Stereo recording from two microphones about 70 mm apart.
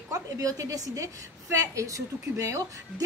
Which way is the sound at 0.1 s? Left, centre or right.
Right.